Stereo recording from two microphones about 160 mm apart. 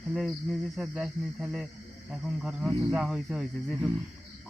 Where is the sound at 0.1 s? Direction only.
Centre (ahead or behind).